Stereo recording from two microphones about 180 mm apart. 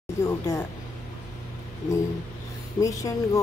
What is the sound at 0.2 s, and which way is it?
Speech, 15° left (ahead or behind).